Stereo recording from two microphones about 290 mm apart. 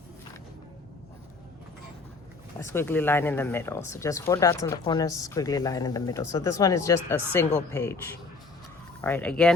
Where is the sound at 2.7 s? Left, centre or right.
Centre.